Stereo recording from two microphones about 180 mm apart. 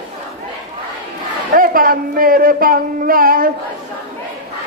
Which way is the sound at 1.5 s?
50° right (ahead or behind).